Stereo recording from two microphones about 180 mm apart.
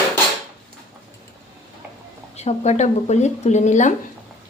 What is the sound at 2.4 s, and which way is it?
Speech, 40° left (ahead or behind).